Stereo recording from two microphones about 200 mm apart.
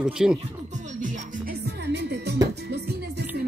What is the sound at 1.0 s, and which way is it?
Music, 40° right (ahead or behind).